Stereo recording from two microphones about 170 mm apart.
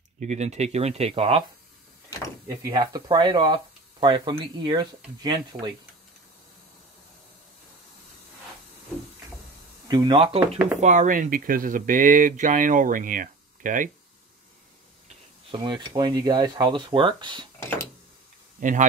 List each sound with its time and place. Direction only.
0.2 s speech: 45° right (ahead or behind)
2.4 s speech: 25° right (ahead or behind)
9.8 s speech: 25° right (ahead or behind)
10.8 s speech: 45° right (ahead or behind)
15.5 s speech: 25° right (ahead or behind)
18.6 s speech: 50° right (ahead or behind)